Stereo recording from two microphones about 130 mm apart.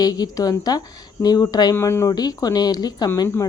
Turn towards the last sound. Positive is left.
turn(degrees=30)  # may be behind; listen again after turning